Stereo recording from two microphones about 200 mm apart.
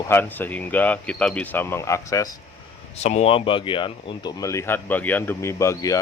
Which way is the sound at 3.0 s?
35° left (ahead or behind).